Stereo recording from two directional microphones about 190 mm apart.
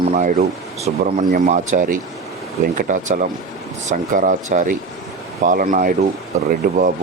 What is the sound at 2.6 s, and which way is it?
Speech, 45° right (ahead or behind).